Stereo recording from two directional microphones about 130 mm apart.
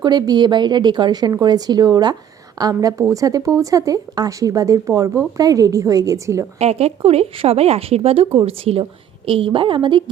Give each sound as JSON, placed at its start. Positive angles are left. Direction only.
{"t": 0.0, "sound": "a woman's voice", "side_deg": -35}
{"t": 6.6, "sound": "a woman's voice", "side_deg": -55}